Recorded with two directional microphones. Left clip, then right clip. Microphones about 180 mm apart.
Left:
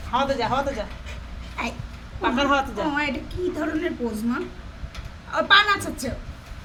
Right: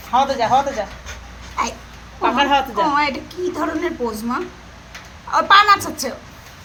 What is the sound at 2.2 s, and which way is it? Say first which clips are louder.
Speech: right 5 dB; 45° left (ahead or behind).